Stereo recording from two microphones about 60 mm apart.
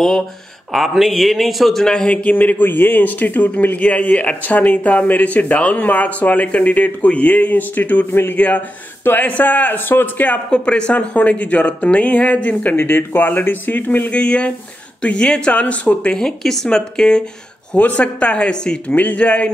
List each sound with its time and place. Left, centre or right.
0.7 s a man's voice: centre
2.3 s a man's voice: left
8.1 s speech: left
8.4 s a man's voice: left
10.5 s a man's voice: centre
14.1 s a man's voice: centre
17.7 s a man's voice: left
18.9 s a man's voice: left